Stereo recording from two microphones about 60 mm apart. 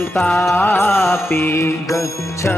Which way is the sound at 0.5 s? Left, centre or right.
Left.